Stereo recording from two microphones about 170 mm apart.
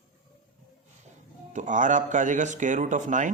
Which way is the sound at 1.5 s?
50° right (ahead or behind).